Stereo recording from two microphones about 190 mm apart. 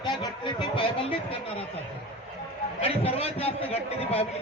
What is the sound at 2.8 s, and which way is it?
A man's voice, 30° left (ahead or behind).